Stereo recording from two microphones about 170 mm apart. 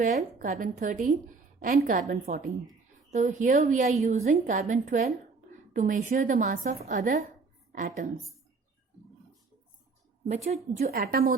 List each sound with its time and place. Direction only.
0.0 s a woman's voice: 45° right (ahead or behind)
10.2 s a woman's voice: 40° right (ahead or behind)
10.9 s a woman's voice: 60° right (ahead or behind)